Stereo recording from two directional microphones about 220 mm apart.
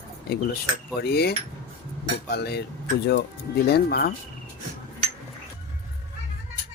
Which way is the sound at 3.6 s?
45° left (ahead or behind).